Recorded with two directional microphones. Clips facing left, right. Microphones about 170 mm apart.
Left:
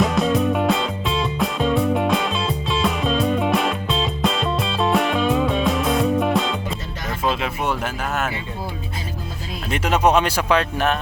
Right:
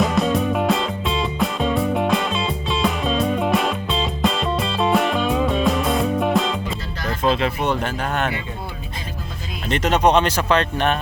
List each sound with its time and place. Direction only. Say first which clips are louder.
0.0 s music: even; centre (ahead or behind)
7.3 s speech: right 3 dB; 5° left (ahead or behind)
9.6 s speech: right 1 dB; 10° left (ahead or behind)